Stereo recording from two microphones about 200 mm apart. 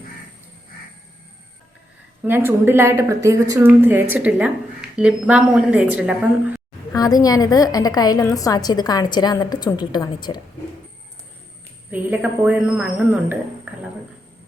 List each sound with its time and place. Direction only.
2.2 s a woman's voice: 10° right (ahead or behind)
6.9 s a woman's voice: 20° left (ahead or behind)
11.9 s a woman's voice: 10° right (ahead or behind)